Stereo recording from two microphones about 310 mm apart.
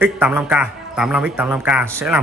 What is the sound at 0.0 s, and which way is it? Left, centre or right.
A man's voice, centre.